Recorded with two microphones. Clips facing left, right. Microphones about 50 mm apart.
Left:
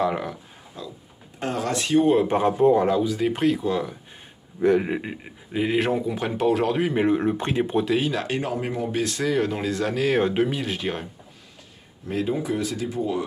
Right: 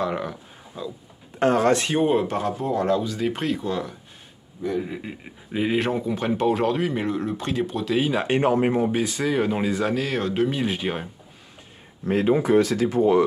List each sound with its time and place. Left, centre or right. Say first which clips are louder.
0.0 s speech: left 2 dB; centre
0.7 s a sound: right 4 dB; centre
1.4 s speech: right 7 dB; right
2.2 s speech: left 7 dB; left
2.8 s speech: left 1 dB; centre
4.6 s speech: left 7 dB; left
5.2 s speech: even; centre
6.8 s speech: left 4 dB; centre
8.0 s speech: right 2 dB; centre
8.3 s speech: right 7 dB; right
8.9 s speech: even; centre
9.9 s speech: left 3 dB; centre
10.6 s speech: right 2 dB; centre
12.0 s speech: right 5 dB; right